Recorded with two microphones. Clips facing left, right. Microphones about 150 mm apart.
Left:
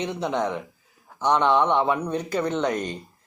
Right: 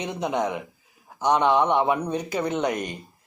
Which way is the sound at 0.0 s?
15° right (ahead or behind).